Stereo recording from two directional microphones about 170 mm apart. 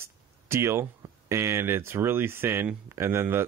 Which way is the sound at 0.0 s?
15° right (ahead or behind).